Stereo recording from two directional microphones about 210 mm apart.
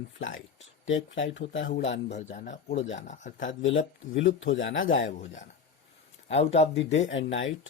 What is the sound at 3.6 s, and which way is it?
Speech, 65° left (ahead or behind).